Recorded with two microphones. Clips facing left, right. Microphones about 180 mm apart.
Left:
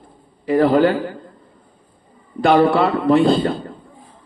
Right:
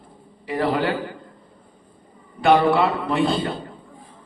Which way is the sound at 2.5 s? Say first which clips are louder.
Left 4 dB; 45° left (ahead or behind).